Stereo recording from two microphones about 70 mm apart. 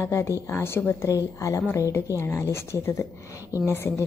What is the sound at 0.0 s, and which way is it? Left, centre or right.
Speech, left.